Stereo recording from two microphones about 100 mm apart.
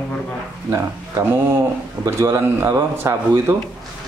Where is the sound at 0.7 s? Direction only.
25° right (ahead or behind).